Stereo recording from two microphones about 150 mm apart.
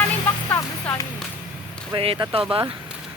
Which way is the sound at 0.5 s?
15° left (ahead or behind).